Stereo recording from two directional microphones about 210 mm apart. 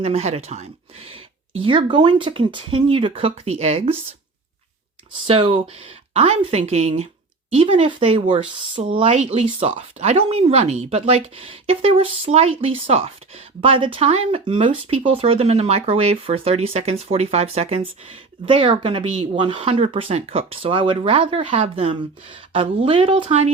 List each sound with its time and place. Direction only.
0.0 s speech: 30° right (ahead or behind)
5.3 s speech: 25° right (ahead or behind)